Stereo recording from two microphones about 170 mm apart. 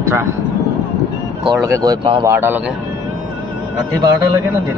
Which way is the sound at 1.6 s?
20° right (ahead or behind).